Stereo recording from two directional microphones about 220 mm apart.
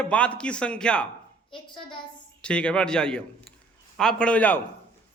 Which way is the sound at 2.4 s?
5° left (ahead or behind).